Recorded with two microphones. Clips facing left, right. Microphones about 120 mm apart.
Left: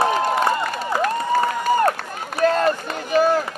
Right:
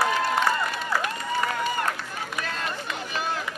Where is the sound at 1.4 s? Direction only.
45° left (ahead or behind).